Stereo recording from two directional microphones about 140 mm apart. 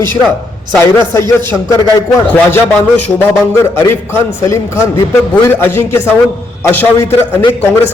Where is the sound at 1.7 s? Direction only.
25° left (ahead or behind).